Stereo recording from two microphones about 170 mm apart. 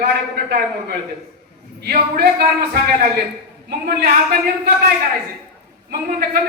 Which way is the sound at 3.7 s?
65° right (ahead or behind).